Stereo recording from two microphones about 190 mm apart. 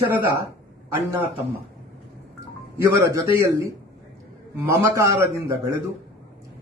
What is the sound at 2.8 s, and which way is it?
A man's voice, 15° right (ahead or behind).